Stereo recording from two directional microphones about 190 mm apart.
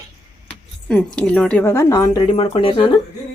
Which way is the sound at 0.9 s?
5° left (ahead or behind).